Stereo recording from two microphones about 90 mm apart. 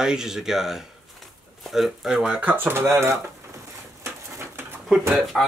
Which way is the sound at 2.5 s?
25° right (ahead or behind).